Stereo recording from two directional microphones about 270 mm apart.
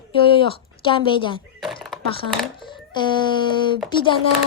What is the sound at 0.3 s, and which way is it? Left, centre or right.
A woman's voice, centre.